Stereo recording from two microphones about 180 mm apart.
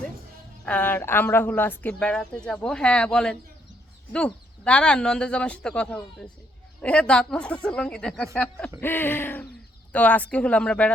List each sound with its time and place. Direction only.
0.6 s speech: 10° left (ahead or behind)